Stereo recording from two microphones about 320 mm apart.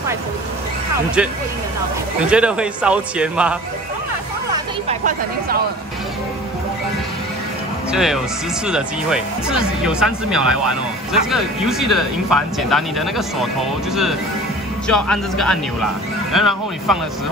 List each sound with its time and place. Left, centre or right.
2.2 s speech: centre
4.8 s speech: right
7.9 s speech: centre
14.9 s speech: centre